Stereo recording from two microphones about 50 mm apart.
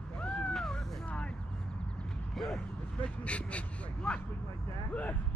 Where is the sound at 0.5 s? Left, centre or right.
Centre.